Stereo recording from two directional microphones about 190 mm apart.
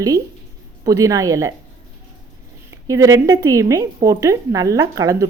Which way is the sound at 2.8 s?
15° right (ahead or behind).